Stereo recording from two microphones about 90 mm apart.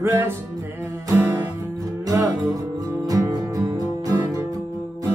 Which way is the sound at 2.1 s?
40° right (ahead or behind).